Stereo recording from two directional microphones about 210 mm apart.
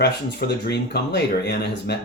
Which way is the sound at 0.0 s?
50° left (ahead or behind).